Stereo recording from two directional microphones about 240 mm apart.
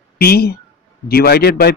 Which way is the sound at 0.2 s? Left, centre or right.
Left.